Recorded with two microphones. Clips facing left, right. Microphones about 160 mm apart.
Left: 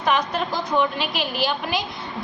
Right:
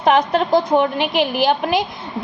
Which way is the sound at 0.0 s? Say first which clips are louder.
Right 7 dB; 60° right (ahead or behind).